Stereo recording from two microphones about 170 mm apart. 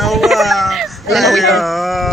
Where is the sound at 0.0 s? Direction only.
Centre (ahead or behind).